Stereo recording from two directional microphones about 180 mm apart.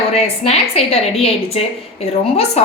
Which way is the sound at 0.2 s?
35° left (ahead or behind).